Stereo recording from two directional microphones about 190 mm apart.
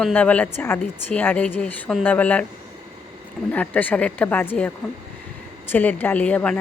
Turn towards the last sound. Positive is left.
turn(degrees=5)  # may be behind; listen again after turning